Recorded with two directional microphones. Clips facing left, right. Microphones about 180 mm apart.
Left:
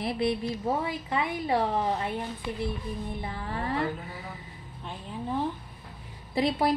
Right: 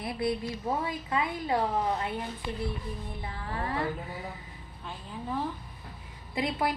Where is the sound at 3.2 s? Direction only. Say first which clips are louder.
Left 2 dB; 25° left (ahead or behind).